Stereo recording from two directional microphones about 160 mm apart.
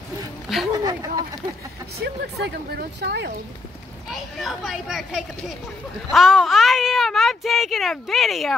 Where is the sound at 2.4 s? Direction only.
90° right.